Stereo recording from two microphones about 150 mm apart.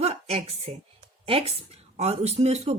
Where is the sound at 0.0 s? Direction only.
45° right (ahead or behind).